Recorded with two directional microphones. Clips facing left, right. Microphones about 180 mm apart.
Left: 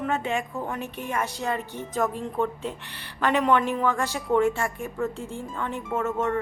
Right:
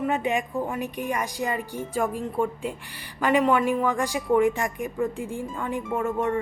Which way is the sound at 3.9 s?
15° right (ahead or behind).